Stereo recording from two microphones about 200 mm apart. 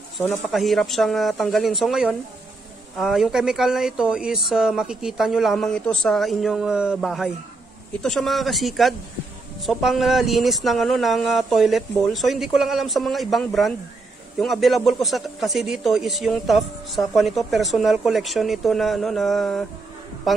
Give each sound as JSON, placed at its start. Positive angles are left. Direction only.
{"t": 0.5, "sound": "speech", "side_deg": 0}